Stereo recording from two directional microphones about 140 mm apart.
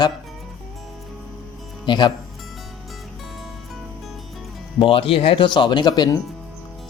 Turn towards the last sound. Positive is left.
turn(degrees=30)  # may be behind; listen again after turning